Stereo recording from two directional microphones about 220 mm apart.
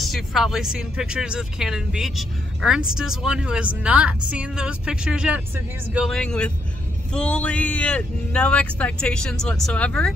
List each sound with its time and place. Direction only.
0.0 s speech: centre (ahead or behind)